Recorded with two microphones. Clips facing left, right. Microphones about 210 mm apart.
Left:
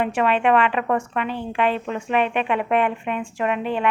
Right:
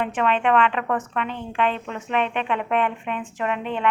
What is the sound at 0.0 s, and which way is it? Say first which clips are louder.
A woman's voice: left 2 dB; 10° left (ahead or behind).